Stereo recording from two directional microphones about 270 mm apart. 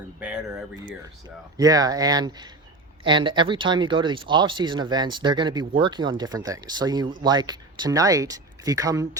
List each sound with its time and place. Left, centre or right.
0.2 s speech: centre